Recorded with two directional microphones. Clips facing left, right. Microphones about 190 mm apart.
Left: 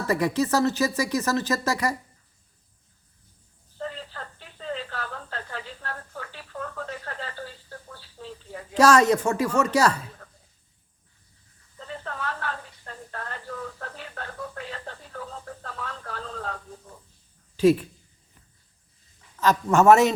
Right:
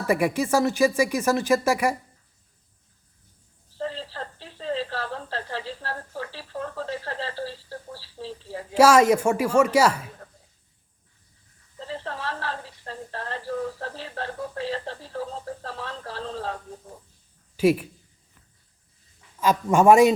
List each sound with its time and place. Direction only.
0.1 s speech: 10° right (ahead or behind)
3.8 s a sound: 30° right (ahead or behind)
8.7 s speech: 10° right (ahead or behind)
11.8 s a sound: 30° right (ahead or behind)
17.6 s speech: 10° right (ahead or behind)
19.4 s speech: 10° right (ahead or behind)